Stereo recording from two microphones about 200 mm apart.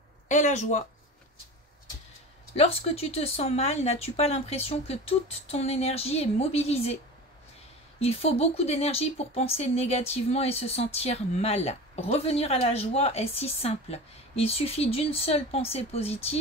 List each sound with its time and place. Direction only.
0.3 s speech: 35° left (ahead or behind)
2.5 s speech: 30° left (ahead or behind)
8.0 s speech: 30° left (ahead or behind)